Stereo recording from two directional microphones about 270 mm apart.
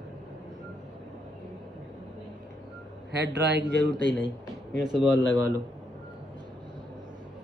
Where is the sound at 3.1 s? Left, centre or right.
Right.